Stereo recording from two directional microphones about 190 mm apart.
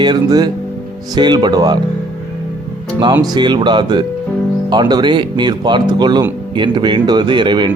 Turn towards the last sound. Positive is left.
turn(degrees=-25)  # may be behind; listen again after turning